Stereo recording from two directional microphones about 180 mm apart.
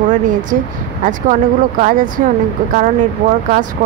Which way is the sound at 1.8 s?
50° right (ahead or behind).